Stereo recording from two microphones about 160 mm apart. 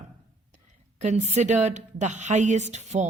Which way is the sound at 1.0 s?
45° right (ahead or behind).